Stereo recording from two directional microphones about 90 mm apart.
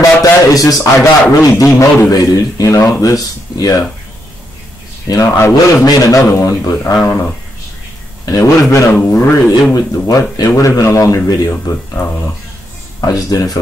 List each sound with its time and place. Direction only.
0.0 s a sound: 40° left (ahead or behind)
1.4 s a man's voice: 35° left (ahead or behind)
5.0 s a man's voice: 35° left (ahead or behind)
8.3 s a man's voice: 35° left (ahead or behind)
8.9 s speech: 25° left (ahead or behind)
9.8 s a man's voice: 40° left (ahead or behind)